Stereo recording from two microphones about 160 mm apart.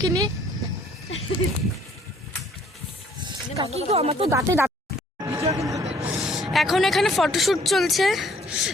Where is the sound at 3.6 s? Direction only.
40° right (ahead or behind).